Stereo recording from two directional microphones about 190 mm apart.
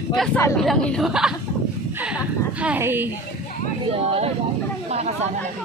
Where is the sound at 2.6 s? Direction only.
10° right (ahead or behind).